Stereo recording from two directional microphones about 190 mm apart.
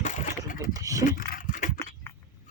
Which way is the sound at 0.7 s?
15° right (ahead or behind).